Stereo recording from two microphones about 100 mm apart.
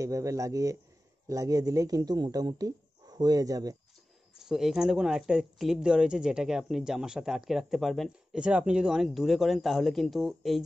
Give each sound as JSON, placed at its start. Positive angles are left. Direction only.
{"t": 0.0, "sound": "speech", "side_deg": -30}
{"t": 4.4, "sound": "speech", "side_deg": -5}
{"t": 8.4, "sound": "speech", "side_deg": -10}